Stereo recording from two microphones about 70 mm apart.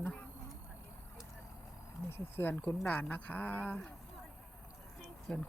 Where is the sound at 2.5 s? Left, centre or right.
Centre.